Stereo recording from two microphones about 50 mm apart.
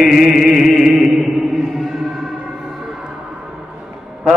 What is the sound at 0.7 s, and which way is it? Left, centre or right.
Music, centre.